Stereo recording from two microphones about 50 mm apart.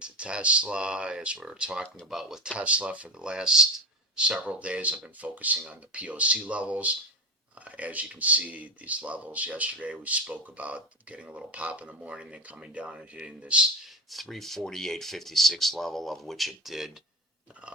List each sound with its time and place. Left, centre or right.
0.0 s speech: right
2.0 s speech: centre
2.6 s speech: right
14.1 s speech: centre